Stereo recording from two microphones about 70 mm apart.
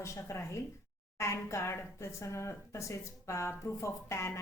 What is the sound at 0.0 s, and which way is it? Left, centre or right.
A woman's voice, left.